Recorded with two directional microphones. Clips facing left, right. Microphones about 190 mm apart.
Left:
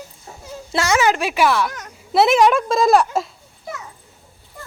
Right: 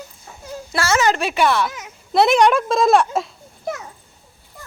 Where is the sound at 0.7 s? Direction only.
20° left (ahead or behind); by 3.1 s centre (ahead or behind).